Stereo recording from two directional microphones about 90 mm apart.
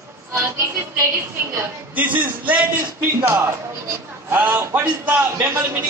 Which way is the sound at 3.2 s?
30° right (ahead or behind).